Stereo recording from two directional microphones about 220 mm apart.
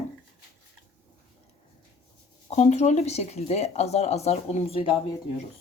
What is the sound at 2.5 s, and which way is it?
Speech, 30° left (ahead or behind).